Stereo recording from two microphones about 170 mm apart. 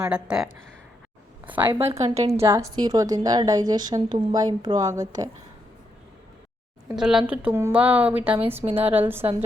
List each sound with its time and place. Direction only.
0.0 s a woman's voice: 5° right (ahead or behind)
1.9 s a woman's voice: 35° right (ahead or behind)
2.4 s a woman's voice: 15° right (ahead or behind)
6.9 s a woman's voice: 5° right (ahead or behind)